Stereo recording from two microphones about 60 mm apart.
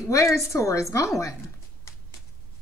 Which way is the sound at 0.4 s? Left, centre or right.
Left.